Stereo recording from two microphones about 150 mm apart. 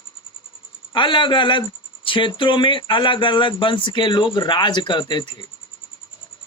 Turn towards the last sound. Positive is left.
turn(degrees=30)  # may be behind; listen again after turning